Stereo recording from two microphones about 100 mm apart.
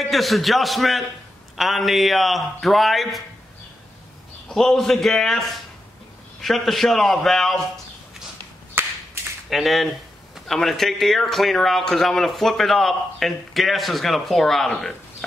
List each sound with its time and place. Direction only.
0.1 s a man's voice: centre (ahead or behind)
4.5 s a man's voice: 5° left (ahead or behind)
8.8 s a sound: 20° right (ahead or behind)
9.5 s a man's voice: centre (ahead or behind)